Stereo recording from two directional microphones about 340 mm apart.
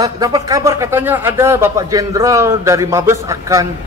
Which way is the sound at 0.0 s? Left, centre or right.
Centre.